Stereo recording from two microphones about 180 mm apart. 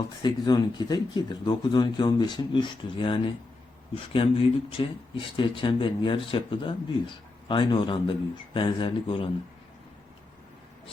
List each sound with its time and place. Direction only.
0.2 s speech: 25° left (ahead or behind)